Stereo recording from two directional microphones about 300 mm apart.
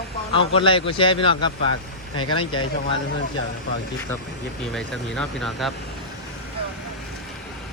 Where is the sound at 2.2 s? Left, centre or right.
Left.